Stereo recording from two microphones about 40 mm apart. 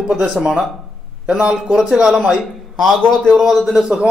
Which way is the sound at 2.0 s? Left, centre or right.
Centre.